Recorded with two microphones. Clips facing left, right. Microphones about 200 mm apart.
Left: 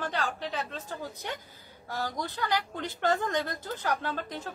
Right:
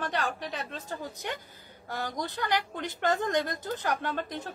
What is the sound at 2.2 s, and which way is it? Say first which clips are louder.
Speech: right 2 dB; 15° right (ahead or behind).